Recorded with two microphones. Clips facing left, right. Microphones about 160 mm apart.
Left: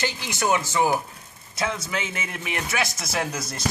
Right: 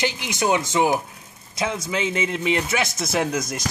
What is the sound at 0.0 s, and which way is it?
A man's voice, 15° right (ahead or behind).